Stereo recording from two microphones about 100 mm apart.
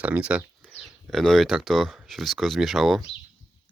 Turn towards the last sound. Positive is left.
turn(degrees=0)  # may be behind; listen again after turning